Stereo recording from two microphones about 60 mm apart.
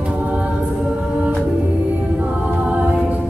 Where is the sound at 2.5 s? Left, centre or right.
Right.